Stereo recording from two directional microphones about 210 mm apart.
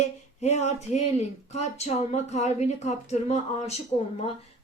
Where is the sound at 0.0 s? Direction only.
35° left (ahead or behind).